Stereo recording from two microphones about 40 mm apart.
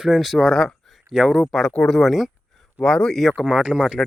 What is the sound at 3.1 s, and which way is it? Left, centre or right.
Speech, centre.